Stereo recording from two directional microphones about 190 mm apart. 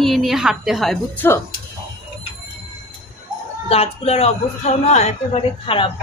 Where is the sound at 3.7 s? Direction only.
30° left (ahead or behind).